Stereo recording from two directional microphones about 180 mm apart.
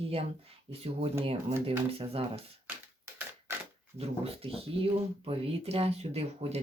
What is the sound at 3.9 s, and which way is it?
Speech, 30° right (ahead or behind).